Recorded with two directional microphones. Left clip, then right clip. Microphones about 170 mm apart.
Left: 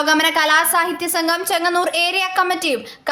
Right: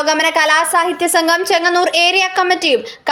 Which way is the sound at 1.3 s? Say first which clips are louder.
Right 5 dB; 10° right (ahead or behind).